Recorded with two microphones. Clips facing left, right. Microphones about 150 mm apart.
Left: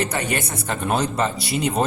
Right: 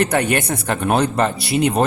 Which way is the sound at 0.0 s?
60° right (ahead or behind).